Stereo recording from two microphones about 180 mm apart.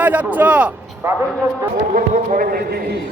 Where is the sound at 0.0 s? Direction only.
10° right (ahead or behind).